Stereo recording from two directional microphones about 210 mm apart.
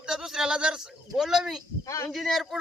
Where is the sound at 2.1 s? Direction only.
Centre (ahead or behind).